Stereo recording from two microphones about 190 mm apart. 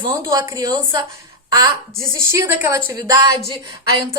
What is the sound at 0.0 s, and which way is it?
A woman's voice, 20° right (ahead or behind).